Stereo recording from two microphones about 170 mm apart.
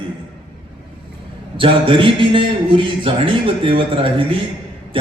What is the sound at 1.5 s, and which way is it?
A man's voice, 30° right (ahead or behind).